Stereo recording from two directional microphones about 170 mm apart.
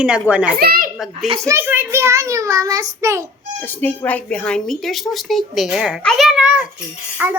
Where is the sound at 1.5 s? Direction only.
10° right (ahead or behind).